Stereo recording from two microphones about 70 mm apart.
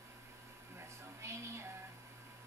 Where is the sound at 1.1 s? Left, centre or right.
Right.